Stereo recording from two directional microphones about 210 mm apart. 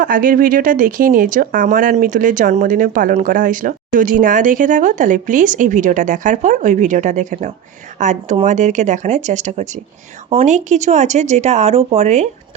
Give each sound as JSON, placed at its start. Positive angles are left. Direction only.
{"t": 0.0, "sound": "speech", "side_deg": -40}